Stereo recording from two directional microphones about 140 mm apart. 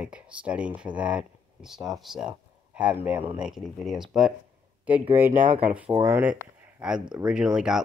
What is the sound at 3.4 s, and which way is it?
Speech, centre (ahead or behind).